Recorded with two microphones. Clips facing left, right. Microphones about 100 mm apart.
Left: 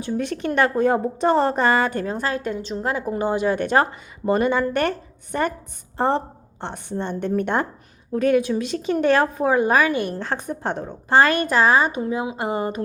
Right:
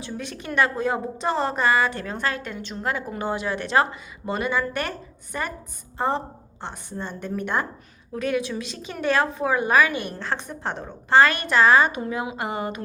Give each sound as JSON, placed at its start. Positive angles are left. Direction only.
{"t": 0.0, "sound": "a woman's voice", "side_deg": 50}
{"t": 9.3, "sound": "a woman's voice", "side_deg": 40}
{"t": 12.0, "sound": "speech", "side_deg": 25}